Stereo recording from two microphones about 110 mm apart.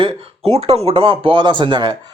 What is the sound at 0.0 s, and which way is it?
Speech, 65° right (ahead or behind).